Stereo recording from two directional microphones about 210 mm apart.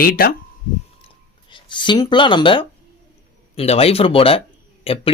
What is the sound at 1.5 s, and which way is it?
Speech, 20° left (ahead or behind).